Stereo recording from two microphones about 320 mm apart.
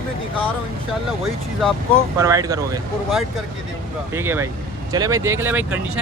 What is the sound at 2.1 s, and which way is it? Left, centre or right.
Speech, centre.